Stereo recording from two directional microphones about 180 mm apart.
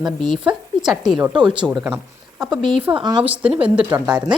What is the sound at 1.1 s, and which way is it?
Speech, 25° right (ahead or behind).